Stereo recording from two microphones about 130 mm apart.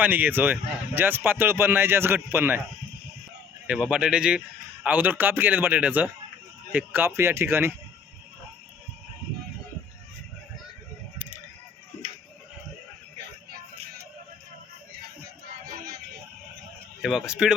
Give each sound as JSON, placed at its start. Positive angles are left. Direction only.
{"t": 0.0, "sound": "a man's voice", "side_deg": -15}
{"t": 3.7, "sound": "a man's voice", "side_deg": -5}
{"t": 17.0, "sound": "speech", "side_deg": -5}